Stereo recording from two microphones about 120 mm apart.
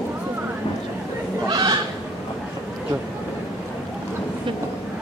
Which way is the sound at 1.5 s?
35° right (ahead or behind).